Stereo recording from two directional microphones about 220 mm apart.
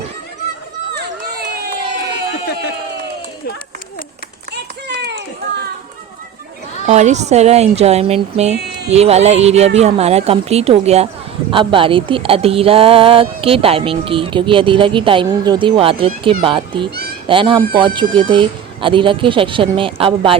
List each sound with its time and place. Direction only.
4.5 s run: 50° right (ahead or behind)
6.8 s speech: 30° right (ahead or behind)